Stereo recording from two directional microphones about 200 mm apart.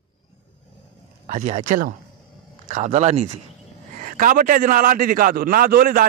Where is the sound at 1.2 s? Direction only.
40° right (ahead or behind).